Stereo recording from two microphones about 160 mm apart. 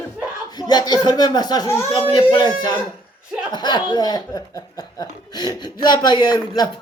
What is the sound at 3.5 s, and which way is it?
Speech, 25° left (ahead or behind).